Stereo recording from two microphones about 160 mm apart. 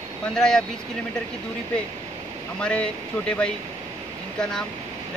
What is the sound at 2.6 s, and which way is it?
Speech, 5° left (ahead or behind).